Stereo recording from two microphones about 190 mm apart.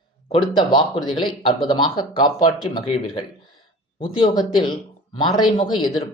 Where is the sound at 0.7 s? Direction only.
25° left (ahead or behind).